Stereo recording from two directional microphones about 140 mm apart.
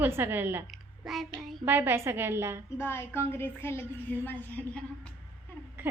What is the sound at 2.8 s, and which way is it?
A woman's voice, 15° left (ahead or behind).